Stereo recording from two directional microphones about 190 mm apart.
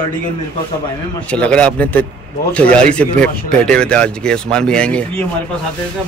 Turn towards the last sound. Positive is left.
turn(degrees=5)  # may be behind; listen again after turning